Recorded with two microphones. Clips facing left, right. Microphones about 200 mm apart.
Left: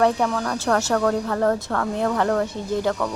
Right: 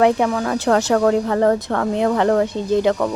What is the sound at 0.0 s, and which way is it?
Speech, 15° right (ahead or behind).